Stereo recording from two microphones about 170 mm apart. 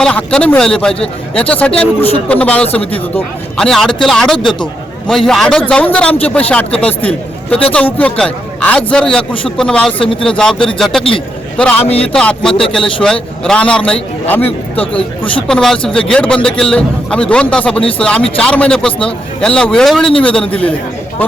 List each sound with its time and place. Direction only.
0.0 s a man's voice: 5° left (ahead or behind)
7.5 s a man's voice: 5° left (ahead or behind)
10.0 s speech: 30° left (ahead or behind)
10.2 s a man's voice: 5° left (ahead or behind)
11.8 s speech: 35° left (ahead or behind)
12.0 s a man's voice: 5° left (ahead or behind)
14.9 s speech: 30° left (ahead or behind)
15.4 s a man's voice: 5° left (ahead or behind)